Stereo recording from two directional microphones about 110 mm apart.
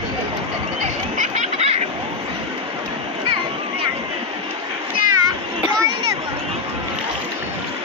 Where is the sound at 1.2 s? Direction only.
85° right.